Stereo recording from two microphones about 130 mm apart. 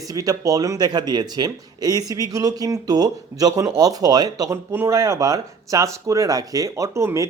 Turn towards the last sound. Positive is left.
turn(degrees=-25)  # may be behind; listen again after turning